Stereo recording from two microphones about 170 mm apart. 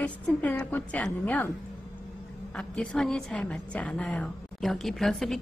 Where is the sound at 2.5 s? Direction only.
5° left (ahead or behind).